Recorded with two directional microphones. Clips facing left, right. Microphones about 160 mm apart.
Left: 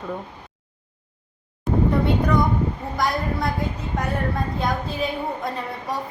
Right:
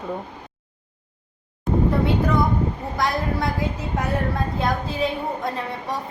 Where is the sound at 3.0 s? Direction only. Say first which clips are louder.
Even; centre (ahead or behind).